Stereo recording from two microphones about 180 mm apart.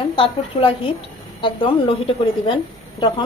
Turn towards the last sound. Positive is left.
turn(degrees=30)  # may be behind; listen again after turning